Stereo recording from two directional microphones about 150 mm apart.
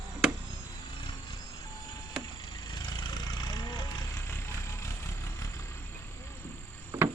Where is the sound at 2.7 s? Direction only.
30° left (ahead or behind).